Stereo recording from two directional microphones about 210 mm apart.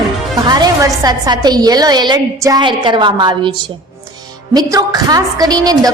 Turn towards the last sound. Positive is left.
turn(degrees=-15)  # may be behind; listen again after turning